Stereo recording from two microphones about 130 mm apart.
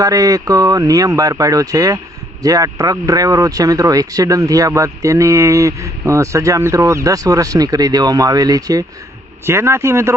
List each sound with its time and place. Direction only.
0.0 s speech: 25° right (ahead or behind)